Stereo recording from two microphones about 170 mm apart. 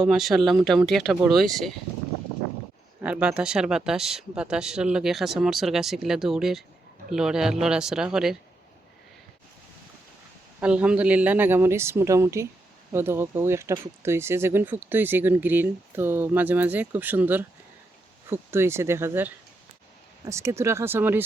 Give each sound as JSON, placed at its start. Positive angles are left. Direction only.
{"t": 0.0, "sound": "speech", "side_deg": 0}
{"t": 3.0, "sound": "speech", "side_deg": -5}
{"t": 10.6, "sound": "speech", "side_deg": -5}